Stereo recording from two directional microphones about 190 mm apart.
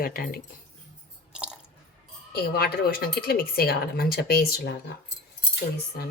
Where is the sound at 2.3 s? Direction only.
55° left (ahead or behind).